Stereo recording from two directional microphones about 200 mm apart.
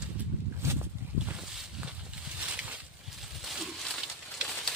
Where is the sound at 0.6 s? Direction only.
15° right (ahead or behind).